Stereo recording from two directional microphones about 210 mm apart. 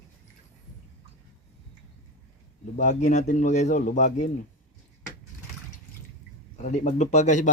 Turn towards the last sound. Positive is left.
turn(degrees=35)  # may be behind; listen again after turning